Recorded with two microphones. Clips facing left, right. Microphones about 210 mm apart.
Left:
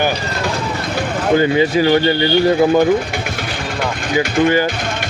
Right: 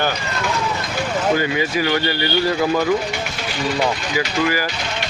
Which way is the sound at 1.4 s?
25° left (ahead or behind).